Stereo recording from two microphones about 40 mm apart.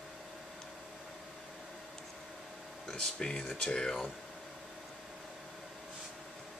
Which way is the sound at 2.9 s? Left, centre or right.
Centre.